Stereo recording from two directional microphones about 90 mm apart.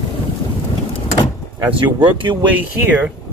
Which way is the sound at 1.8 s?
60° right (ahead or behind).